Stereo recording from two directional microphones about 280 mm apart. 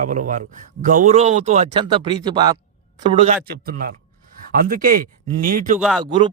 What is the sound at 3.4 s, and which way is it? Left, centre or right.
Speech, right.